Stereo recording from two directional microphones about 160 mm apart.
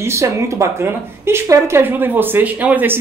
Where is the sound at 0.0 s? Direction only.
15° right (ahead or behind).